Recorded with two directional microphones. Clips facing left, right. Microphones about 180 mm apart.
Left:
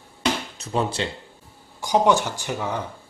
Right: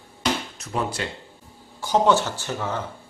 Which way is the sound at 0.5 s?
25° left (ahead or behind).